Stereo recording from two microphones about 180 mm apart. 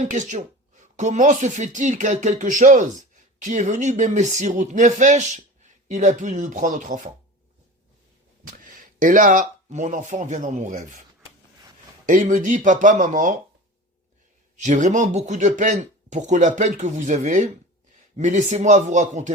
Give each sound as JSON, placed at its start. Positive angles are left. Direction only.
{"t": 0.0, "sound": "speech", "side_deg": -45}
{"t": 8.6, "sound": "speech", "side_deg": -50}
{"t": 12.0, "sound": "speech", "side_deg": -45}
{"t": 14.5, "sound": "speech", "side_deg": -45}